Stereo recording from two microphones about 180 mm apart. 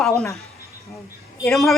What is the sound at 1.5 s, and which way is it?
Speech, centre (ahead or behind).